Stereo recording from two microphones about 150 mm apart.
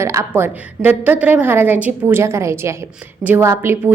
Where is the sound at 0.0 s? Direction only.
20° right (ahead or behind).